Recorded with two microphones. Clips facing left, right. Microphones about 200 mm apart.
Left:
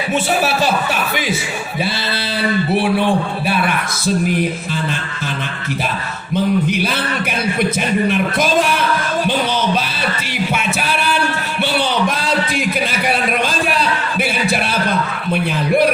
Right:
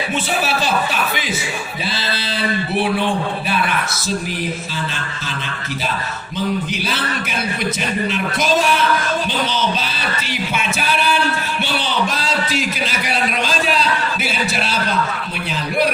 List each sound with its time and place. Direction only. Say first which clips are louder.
3.7 s music: left 3 dB; 55° left (ahead or behind)
6.3 s music: left 6 dB; 55° left (ahead or behind)
12.0 s a sound: left 3 dB; 55° left (ahead or behind)